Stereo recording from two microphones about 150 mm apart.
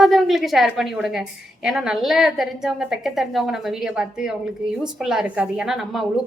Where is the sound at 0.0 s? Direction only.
Centre (ahead or behind).